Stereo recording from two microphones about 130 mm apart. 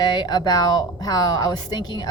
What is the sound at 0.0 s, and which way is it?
Speech, 35° left (ahead or behind).